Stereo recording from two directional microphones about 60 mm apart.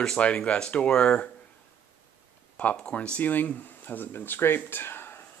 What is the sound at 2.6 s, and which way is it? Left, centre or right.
Speech, left.